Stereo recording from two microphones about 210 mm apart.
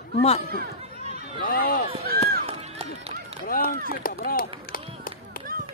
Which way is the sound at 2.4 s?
30° right (ahead or behind).